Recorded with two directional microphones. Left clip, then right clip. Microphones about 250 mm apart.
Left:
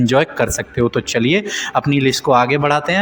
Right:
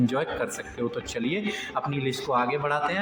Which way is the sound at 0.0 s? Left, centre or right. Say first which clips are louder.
Left 12 dB; left.